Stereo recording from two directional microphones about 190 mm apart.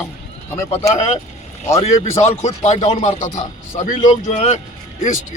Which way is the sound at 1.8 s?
35° left (ahead or behind).